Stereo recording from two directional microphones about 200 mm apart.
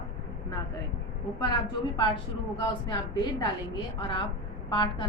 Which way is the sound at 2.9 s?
20° left (ahead or behind).